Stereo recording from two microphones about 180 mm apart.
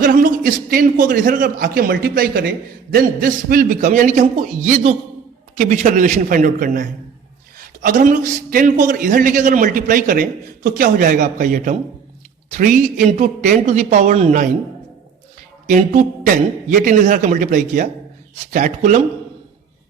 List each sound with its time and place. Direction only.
0.0 s a man's voice: 50° right (ahead or behind)
15.6 s a man's voice: 45° right (ahead or behind)